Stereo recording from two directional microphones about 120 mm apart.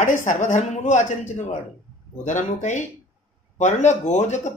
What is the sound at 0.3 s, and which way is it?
Speech, 90° left.